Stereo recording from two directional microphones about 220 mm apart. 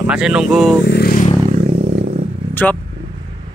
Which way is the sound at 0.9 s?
45° left (ahead or behind).